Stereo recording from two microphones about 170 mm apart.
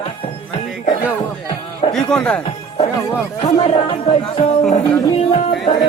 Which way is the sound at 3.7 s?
35° left (ahead or behind).